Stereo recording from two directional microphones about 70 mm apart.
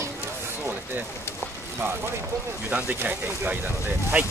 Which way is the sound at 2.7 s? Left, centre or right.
Right.